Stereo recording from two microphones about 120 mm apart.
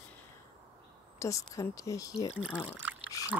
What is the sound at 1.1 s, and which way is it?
Speech, 25° left (ahead or behind).